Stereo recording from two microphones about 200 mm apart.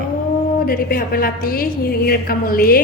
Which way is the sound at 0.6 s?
45° left (ahead or behind).